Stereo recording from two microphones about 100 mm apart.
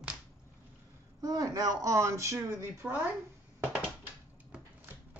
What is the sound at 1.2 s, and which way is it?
Speech, 40° right (ahead or behind).